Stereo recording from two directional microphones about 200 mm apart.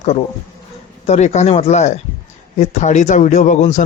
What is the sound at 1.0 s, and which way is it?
Speech, 35° left (ahead or behind).